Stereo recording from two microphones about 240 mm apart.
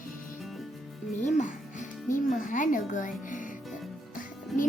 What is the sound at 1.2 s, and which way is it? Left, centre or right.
A child's voice, left.